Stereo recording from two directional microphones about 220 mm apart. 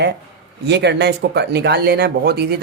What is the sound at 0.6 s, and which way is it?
Speech, 50° right (ahead or behind).